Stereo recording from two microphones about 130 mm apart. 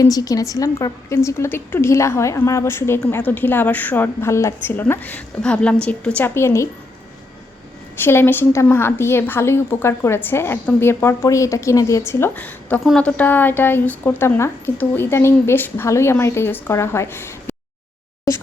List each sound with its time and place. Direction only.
0.0 s a woman's voice: 30° left (ahead or behind)
8.0 s a woman's voice: 15° left (ahead or behind)
12.8 s a woman's voice: centre (ahead or behind)
13.1 s speech: 10° left (ahead or behind)